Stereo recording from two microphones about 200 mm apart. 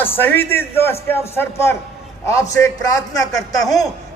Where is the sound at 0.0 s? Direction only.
10° left (ahead or behind).